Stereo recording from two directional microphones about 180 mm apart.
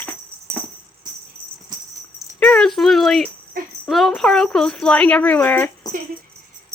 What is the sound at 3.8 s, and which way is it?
Speech, centre (ahead or behind).